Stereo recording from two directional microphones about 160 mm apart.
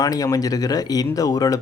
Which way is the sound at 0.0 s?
20° left (ahead or behind).